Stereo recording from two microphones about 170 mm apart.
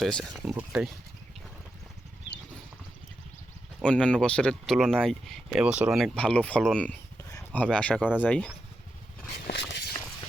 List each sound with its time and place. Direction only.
0.0 s speech: centre (ahead or behind)
3.8 s speech: 5° left (ahead or behind)
9.5 s a sound: 90° left